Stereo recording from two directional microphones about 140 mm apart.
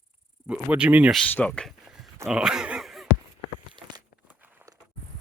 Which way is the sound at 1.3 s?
10° left (ahead or behind).